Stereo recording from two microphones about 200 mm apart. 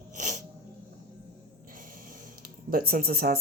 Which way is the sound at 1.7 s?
45° right (ahead or behind).